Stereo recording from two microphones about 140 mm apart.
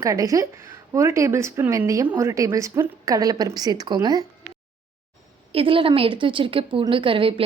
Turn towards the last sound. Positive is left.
turn(degrees=-40)  # may be behind; listen again after turning